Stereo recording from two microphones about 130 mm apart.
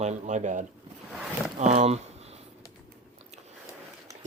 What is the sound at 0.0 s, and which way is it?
Speech, 65° right (ahead or behind).